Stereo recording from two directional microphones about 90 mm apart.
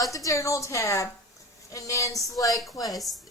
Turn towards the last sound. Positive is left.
turn(degrees=0)  # may be behind; listen again after turning